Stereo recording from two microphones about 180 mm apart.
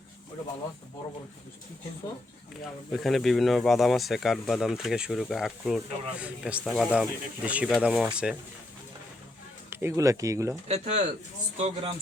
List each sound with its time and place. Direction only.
2.9 s speech: centre (ahead or behind)
9.6 s speech: 15° right (ahead or behind)
10.7 s speech: 40° right (ahead or behind)